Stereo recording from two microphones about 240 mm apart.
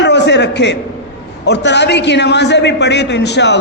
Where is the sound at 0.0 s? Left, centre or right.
Left.